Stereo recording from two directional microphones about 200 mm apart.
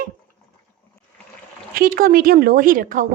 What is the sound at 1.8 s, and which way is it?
A woman's voice, 45° right (ahead or behind).